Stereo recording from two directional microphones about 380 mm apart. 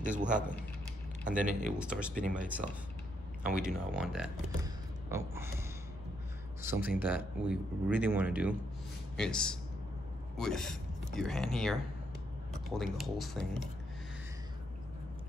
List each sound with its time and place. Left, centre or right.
0.0 s speech: centre
1.8 s speech: centre
3.4 s speech: centre
5.1 s a sound: centre
6.6 s speech: centre